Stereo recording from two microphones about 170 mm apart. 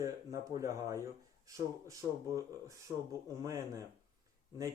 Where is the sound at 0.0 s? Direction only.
20° right (ahead or behind).